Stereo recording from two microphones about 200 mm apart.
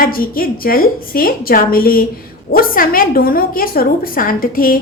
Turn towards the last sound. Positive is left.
turn(degrees=45)  # may be behind; listen again after turning